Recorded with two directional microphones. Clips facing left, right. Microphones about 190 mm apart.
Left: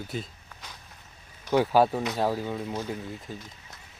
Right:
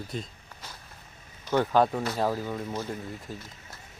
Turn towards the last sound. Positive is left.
turn(degrees=0)  # may be behind; listen again after turning